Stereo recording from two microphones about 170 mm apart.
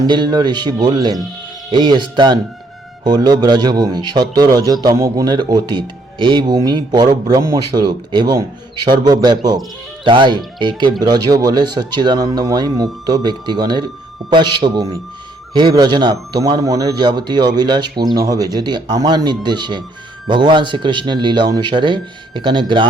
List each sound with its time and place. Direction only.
0.1 s speech: 25° right (ahead or behind)